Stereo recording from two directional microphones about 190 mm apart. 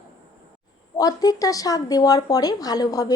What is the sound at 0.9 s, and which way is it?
Speech, 20° left (ahead or behind).